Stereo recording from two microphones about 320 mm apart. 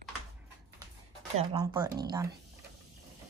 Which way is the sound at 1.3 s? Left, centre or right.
Centre.